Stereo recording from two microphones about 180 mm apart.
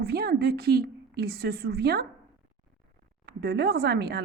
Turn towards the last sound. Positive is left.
turn(degrees=-65)  # may be behind; listen again after turning